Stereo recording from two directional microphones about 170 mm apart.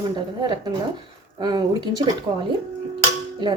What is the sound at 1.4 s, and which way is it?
Speech, 25° right (ahead or behind).